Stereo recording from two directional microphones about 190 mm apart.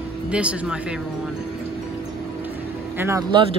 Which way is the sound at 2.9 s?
10° right (ahead or behind).